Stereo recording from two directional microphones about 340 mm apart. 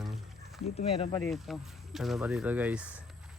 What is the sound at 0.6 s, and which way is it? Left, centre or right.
Speech, centre.